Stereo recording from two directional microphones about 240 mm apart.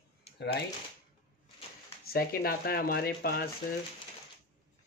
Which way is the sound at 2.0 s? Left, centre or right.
Left.